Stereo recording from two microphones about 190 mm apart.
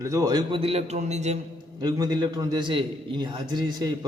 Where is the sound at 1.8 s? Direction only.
20° right (ahead or behind).